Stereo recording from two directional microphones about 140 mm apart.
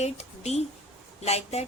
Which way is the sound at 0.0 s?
50° left (ahead or behind).